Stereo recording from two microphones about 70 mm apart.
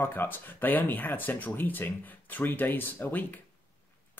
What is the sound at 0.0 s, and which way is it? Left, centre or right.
Speech, left.